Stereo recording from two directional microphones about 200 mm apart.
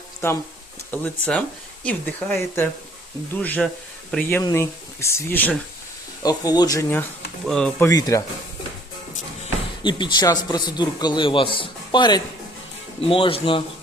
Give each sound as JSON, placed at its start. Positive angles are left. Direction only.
{"t": 0.2, "sound": "a man's voice", "side_deg": 10}
{"t": 7.4, "sound": "speech", "side_deg": 5}
{"t": 7.9, "sound": "speech", "side_deg": 15}
{"t": 9.8, "sound": "a man's voice", "side_deg": 20}